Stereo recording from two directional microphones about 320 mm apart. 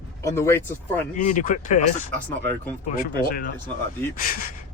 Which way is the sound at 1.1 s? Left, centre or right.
Left.